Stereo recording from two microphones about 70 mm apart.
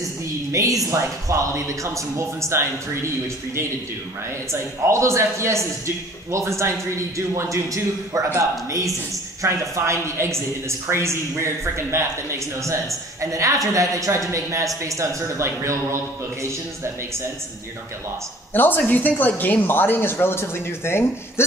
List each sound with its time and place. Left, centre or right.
0.5 s speech: right
4.5 s speech: right
18.5 s speech: left